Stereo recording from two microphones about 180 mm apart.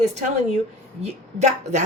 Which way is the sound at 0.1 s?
40° right (ahead or behind).